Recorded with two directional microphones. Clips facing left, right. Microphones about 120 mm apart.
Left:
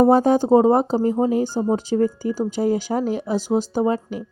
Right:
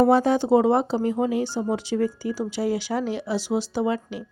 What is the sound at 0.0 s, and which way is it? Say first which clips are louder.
Speech: left 3 dB; 45° left (ahead or behind).